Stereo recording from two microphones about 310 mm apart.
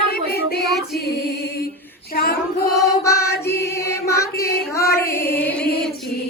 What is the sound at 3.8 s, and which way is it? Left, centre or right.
Music, centre.